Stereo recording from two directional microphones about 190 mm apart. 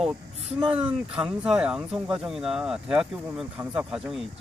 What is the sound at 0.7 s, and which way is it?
Speech, 5° right (ahead or behind).